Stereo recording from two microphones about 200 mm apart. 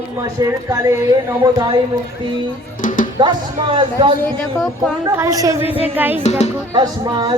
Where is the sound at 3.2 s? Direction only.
25° right (ahead or behind).